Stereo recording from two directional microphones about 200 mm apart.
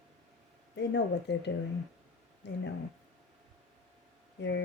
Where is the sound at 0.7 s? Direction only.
60° left (ahead or behind).